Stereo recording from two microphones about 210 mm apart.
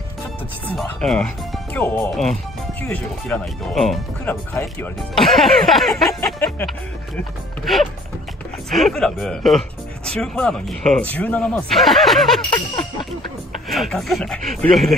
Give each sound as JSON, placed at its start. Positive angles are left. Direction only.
{"t": 0.7, "sound": "speech", "side_deg": 5}
{"t": 8.6, "sound": "speech", "side_deg": 0}
{"t": 13.7, "sound": "speech", "side_deg": 0}